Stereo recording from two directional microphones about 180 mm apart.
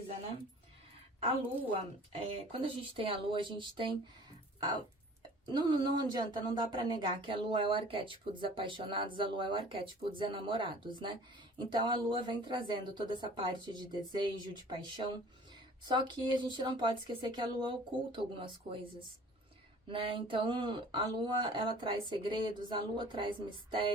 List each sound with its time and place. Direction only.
1.7 s speech: 30° right (ahead or behind)
5.5 s speech: 25° right (ahead or behind)